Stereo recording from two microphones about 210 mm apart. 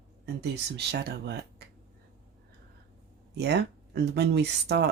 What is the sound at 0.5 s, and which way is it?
Speech, 50° right (ahead or behind).